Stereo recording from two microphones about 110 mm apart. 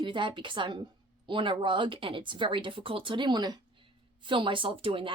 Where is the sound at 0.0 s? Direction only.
50° right (ahead or behind).